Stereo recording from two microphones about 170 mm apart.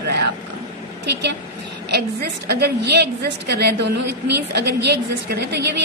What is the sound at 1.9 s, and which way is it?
A woman's voice, 75° right (ahead or behind).